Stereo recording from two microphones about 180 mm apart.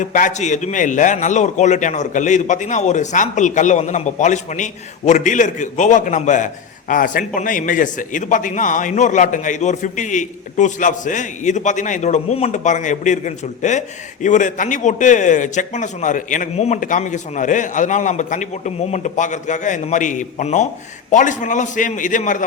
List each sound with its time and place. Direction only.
0.0 s a man's voice: 45° left (ahead or behind)